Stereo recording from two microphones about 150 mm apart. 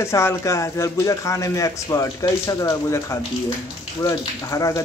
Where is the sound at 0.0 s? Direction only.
15° left (ahead or behind).